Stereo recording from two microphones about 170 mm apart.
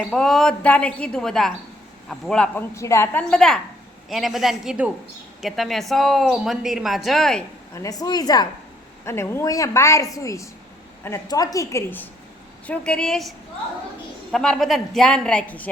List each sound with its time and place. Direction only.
0.1 s speech: centre (ahead or behind)
2.7 s a woman's voice: 15° left (ahead or behind)
7.7 s a woman's voice: 20° left (ahead or behind); by 13.3 s centre (ahead or behind)
14.3 s speech: centre (ahead or behind)